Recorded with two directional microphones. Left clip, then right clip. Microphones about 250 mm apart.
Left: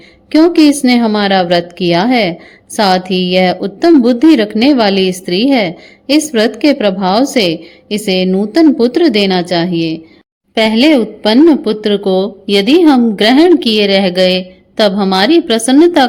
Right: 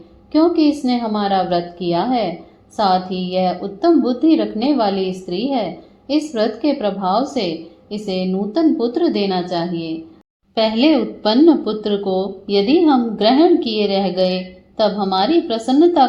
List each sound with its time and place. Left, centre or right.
0.3 s speech: left
10.5 s a woman's voice: left